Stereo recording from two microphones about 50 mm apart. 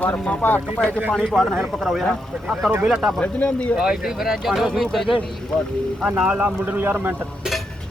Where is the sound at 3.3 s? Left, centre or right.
Left.